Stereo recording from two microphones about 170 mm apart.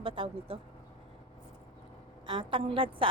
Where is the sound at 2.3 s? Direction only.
30° right (ahead or behind).